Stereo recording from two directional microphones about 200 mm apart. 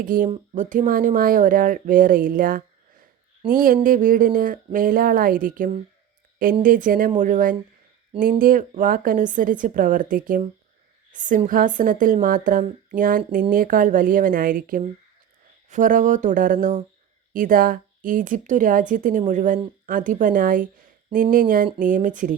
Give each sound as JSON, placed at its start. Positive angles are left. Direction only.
{"t": 0.0, "sound": "speech", "side_deg": -45}